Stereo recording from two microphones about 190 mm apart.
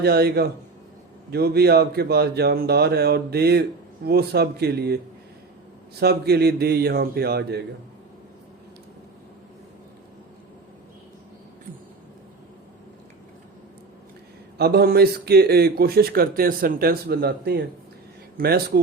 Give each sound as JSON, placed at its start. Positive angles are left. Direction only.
{"t": 0.0, "sound": "a man's voice", "side_deg": -55}
{"t": 6.0, "sound": "a man's voice", "side_deg": -55}
{"t": 14.6, "sound": "a man's voice", "side_deg": -55}